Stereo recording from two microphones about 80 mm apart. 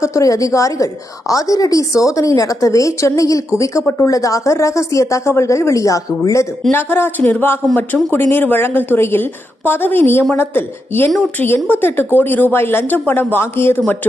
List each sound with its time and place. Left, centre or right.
0.0 s a woman's voice: left
6.7 s a woman's voice: left